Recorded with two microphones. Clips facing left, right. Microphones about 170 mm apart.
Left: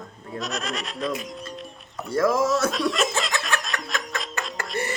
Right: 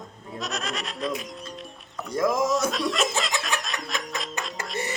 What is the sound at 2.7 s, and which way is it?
Speech, centre (ahead or behind).